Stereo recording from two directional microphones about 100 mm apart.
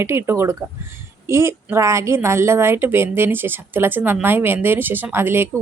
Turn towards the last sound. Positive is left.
turn(degrees=-25)  # may be behind; listen again after turning